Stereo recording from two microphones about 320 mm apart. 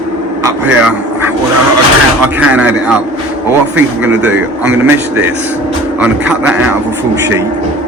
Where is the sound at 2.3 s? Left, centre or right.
Centre.